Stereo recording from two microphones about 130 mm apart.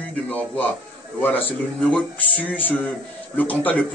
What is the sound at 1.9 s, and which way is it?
Speech, 10° left (ahead or behind).